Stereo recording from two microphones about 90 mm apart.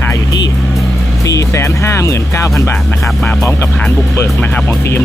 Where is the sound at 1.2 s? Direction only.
40° left (ahead or behind).